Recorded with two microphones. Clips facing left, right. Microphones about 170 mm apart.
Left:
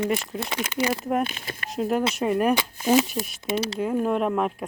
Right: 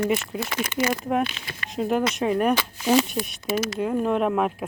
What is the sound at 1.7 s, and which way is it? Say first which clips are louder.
Speech: right 1 dB; centre (ahead or behind).